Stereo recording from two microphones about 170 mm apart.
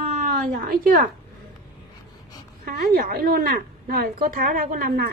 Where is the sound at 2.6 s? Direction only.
65° right (ahead or behind).